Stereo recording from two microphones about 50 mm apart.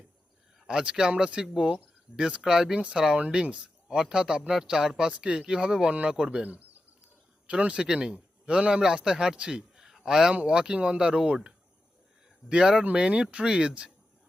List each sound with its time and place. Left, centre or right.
0.7 s speech: centre
3.4 s speech: right
3.8 s speech: centre
5.9 s speech: right
6.1 s speech: centre
6.4 s speech: right
7.8 s speech: centre
8.1 s a man's voice: right
12.5 s speech: centre